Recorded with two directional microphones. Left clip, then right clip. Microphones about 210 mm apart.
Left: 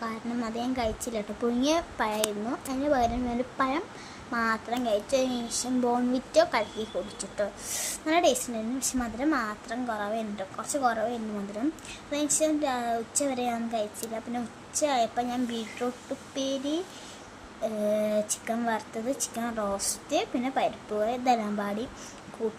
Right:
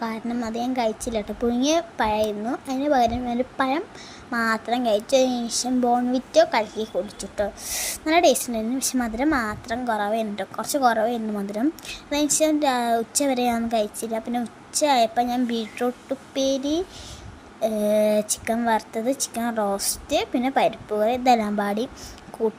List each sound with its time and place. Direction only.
0.0 s a woman's voice: 20° right (ahead or behind)